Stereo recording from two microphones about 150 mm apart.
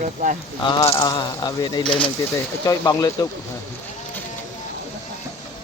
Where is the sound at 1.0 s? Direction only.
25° left (ahead or behind).